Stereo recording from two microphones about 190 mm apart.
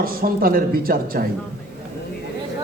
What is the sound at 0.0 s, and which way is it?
A man's voice, 50° right (ahead or behind).